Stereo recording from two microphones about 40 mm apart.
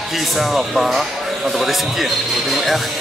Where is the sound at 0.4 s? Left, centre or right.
Centre.